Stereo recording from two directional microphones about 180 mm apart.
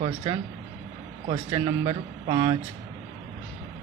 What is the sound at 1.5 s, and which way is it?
Speech, 25° right (ahead or behind).